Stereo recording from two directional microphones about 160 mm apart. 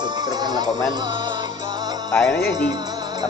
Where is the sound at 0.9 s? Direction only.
30° right (ahead or behind).